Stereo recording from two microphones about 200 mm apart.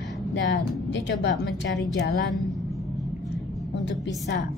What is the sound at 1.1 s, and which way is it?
Speech, 60° left (ahead or behind).